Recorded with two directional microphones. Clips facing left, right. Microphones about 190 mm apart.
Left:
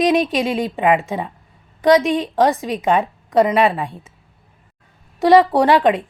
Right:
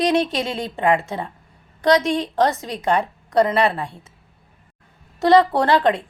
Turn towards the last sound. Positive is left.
turn(degrees=15)  # may be behind; listen again after turning